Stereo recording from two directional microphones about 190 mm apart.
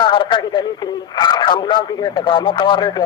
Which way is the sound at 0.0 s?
25° left (ahead or behind).